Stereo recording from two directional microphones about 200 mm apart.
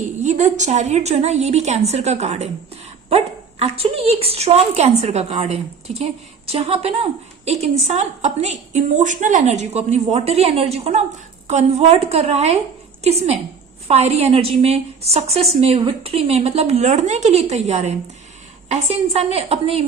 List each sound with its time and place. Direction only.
0.2 s a woman's voice: 35° right (ahead or behind)
3.6 s a woman's voice: 30° right (ahead or behind)